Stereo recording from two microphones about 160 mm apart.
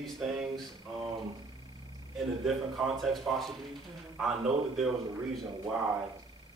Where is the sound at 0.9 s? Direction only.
Centre (ahead or behind).